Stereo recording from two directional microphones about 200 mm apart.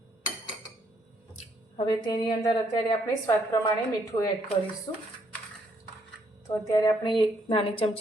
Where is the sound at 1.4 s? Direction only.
25° left (ahead or behind).